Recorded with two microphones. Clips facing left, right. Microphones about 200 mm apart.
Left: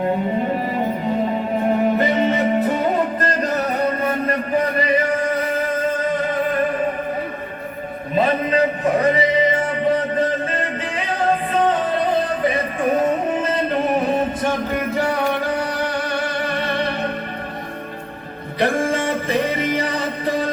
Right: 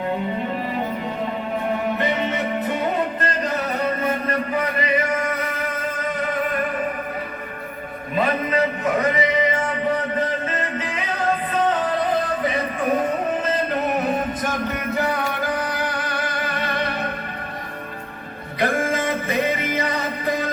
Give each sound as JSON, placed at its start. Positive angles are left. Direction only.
{"t": 2.0, "sound": "music", "side_deg": 40}
{"t": 4.5, "sound": "a sound", "side_deg": 35}
{"t": 8.1, "sound": "music", "side_deg": 30}
{"t": 14.1, "sound": "music", "side_deg": 30}
{"t": 18.6, "sound": "music", "side_deg": 30}